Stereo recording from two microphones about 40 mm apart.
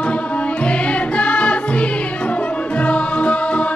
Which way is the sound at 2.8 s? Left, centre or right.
Left.